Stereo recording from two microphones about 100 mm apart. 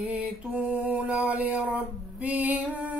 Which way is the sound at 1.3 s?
15° right (ahead or behind).